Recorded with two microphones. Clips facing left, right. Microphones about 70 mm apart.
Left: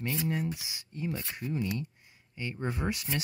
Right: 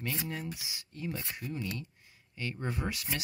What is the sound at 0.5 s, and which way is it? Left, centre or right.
Speech, left.